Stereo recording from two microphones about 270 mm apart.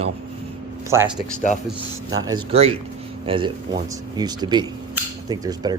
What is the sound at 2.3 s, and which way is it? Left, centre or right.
Speech, right.